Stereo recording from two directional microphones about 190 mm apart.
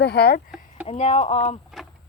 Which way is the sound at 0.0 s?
60° left (ahead or behind).